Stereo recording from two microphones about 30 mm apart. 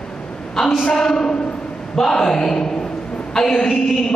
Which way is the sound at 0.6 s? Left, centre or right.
Centre.